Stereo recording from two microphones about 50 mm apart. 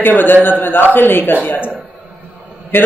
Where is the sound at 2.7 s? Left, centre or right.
Left.